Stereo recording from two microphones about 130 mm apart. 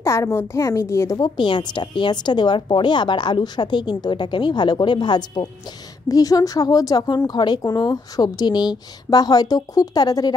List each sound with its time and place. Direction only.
0.0 s a woman's voice: 20° left (ahead or behind)